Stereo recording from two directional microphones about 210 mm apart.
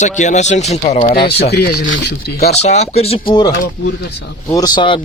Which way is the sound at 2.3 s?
30° left (ahead or behind).